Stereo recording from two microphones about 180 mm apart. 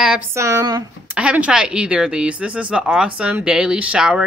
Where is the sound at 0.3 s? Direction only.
15° right (ahead or behind).